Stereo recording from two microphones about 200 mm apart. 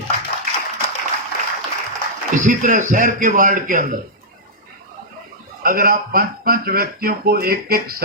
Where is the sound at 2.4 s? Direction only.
40° right (ahead or behind).